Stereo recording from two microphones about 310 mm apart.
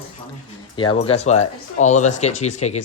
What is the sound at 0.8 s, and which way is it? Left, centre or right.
Speech, centre.